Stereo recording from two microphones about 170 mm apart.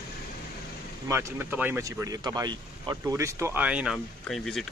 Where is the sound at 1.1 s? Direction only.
15° right (ahead or behind); by 4.6 s centre (ahead or behind).